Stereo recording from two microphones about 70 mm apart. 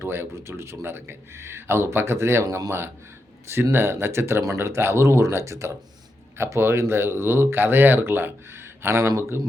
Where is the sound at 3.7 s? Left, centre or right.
Right.